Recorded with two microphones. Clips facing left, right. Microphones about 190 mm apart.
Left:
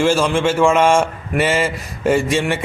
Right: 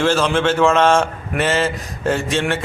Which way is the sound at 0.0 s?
10° left (ahead or behind).